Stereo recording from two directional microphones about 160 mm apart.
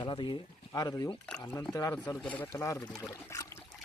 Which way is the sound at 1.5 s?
10° left (ahead or behind).